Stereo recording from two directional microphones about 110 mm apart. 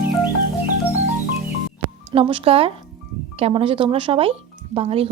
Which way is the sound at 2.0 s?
55° right (ahead or behind).